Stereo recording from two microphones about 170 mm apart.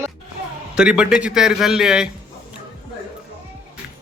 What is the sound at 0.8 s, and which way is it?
Speech, 5° right (ahead or behind).